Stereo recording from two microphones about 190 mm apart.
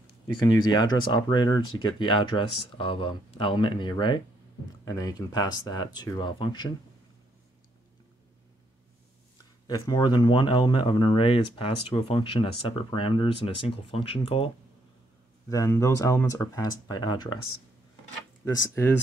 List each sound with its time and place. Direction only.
0.3 s speech: 20° left (ahead or behind)
9.7 s speech: 20° left (ahead or behind)
15.5 s speech: 15° left (ahead or behind)